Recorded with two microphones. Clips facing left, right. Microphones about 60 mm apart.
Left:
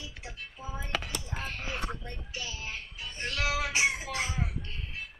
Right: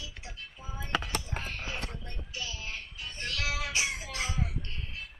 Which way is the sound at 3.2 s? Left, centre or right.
Left.